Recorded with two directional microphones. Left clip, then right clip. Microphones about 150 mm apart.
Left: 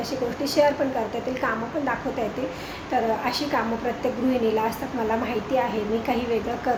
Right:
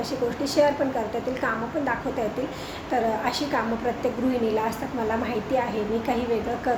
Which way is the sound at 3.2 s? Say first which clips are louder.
Left 1 dB; 10° left (ahead or behind).